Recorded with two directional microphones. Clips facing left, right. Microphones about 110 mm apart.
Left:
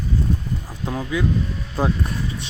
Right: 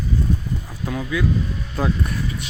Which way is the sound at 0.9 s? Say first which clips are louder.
Even; 30° left (ahead or behind).